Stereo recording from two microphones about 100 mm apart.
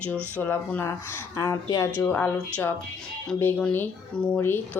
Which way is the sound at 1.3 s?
35° left (ahead or behind).